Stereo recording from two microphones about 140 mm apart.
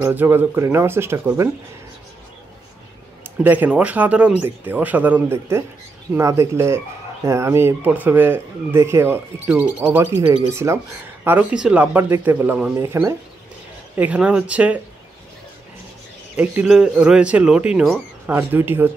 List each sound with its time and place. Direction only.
0.0 s speech: 15° right (ahead or behind)
3.3 s speech: 15° right (ahead or behind)
11.2 s speech: 10° right (ahead or behind)
16.3 s speech: 5° right (ahead or behind)